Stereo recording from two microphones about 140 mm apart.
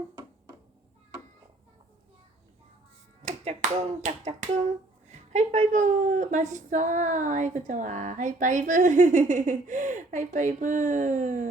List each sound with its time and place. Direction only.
3.2 s finger snapping: 60° right (ahead or behind)
5.0 s a woman's voice: 55° right (ahead or behind)